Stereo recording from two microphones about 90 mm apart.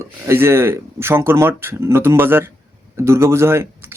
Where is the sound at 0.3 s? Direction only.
30° right (ahead or behind).